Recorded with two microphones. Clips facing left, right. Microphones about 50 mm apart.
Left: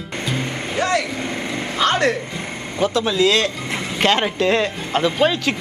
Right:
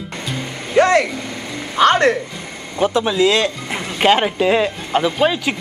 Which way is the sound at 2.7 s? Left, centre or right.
Centre.